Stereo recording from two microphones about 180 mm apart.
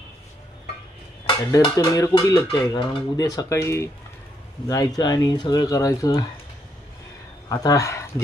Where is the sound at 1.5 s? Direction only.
20° left (ahead or behind).